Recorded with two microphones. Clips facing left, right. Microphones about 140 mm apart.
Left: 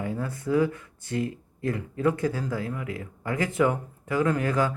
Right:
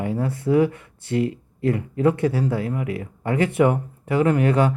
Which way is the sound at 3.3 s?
70° right (ahead or behind).